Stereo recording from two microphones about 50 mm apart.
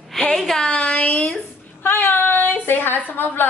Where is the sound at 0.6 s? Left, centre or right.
Left.